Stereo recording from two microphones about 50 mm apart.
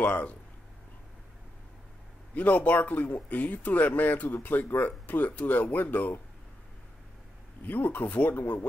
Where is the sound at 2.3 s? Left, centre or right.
Left.